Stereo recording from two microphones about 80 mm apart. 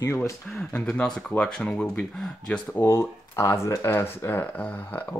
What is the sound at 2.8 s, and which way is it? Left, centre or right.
Speech, left.